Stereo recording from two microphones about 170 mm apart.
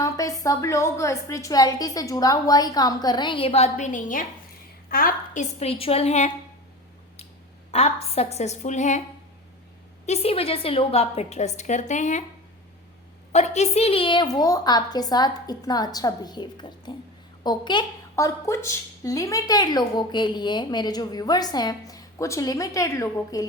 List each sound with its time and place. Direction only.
0.0 s a woman's voice: 20° left (ahead or behind); by 6.3 s 40° left (ahead or behind)
7.7 s a woman's voice: 35° left (ahead or behind)
10.1 s a woman's voice: 35° left (ahead or behind)
13.3 s a woman's voice: 40° left (ahead or behind); by 23.5 s 20° left (ahead or behind)